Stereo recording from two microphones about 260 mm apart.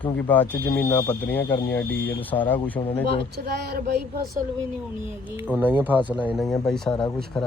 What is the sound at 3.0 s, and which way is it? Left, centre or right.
Speech, right.